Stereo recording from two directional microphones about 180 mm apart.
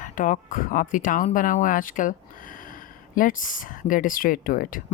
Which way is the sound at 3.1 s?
50° left (ahead or behind).